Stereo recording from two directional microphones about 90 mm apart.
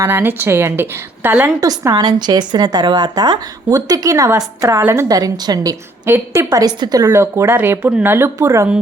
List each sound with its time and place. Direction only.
0.0 s a woman's voice: 25° right (ahead or behind)
1.9 s a woman's voice: 50° right (ahead or behind)
4.8 s a woman's voice: 25° right (ahead or behind)
5.0 s a woman's voice: 45° right (ahead or behind)
6.1 s a woman's voice: 25° right (ahead or behind)
6.4 s a woman's voice: 40° right (ahead or behind)